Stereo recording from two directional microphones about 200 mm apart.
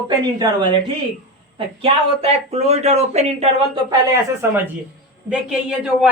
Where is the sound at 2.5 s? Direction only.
30° right (ahead or behind).